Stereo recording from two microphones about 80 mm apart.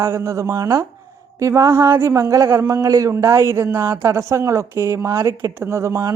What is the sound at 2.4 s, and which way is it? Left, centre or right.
Speech, right.